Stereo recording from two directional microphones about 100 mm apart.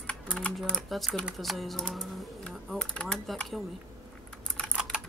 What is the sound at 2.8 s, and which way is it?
Speech, 10° left (ahead or behind).